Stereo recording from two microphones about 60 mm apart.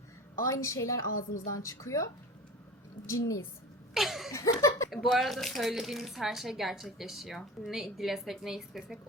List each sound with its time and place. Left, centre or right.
0.6 s a woman's voice: left
3.1 s a woman's voice: left
3.9 s a sound: centre
4.3 s laughter: left
5.1 s speech: centre